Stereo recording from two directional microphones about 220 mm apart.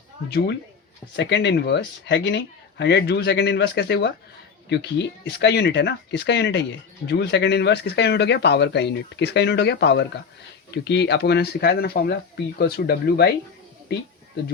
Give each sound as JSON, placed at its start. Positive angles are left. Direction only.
{"t": 0.3, "sound": "speech", "side_deg": 50}